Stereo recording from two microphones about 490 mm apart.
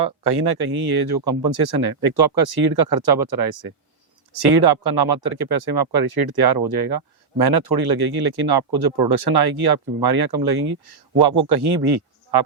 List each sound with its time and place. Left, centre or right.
0.0 s speech: right